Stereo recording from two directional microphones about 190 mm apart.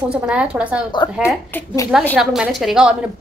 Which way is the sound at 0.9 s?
25° left (ahead or behind).